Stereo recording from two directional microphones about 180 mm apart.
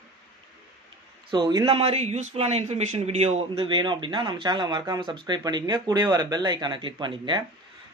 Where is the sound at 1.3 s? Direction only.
20° right (ahead or behind).